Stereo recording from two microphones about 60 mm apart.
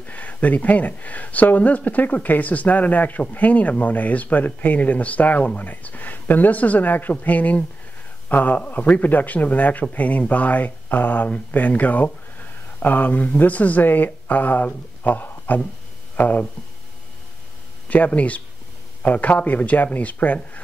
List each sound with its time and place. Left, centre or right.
0.0 s a man's voice: left
17.8 s a man's voice: left